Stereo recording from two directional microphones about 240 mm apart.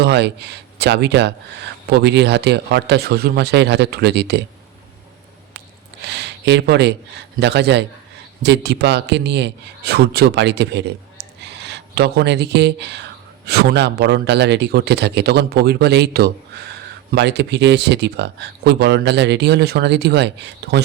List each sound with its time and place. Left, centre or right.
0.0 s speech: right
5.5 s a sound: right
7.3 s speech: right